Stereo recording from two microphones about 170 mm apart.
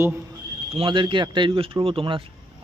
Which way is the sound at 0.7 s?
30° right (ahead or behind).